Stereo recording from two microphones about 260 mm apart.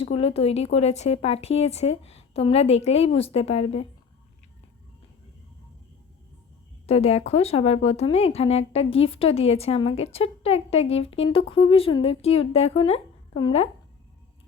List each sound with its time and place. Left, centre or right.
0.0 s a woman's voice: left
6.8 s a woman's voice: left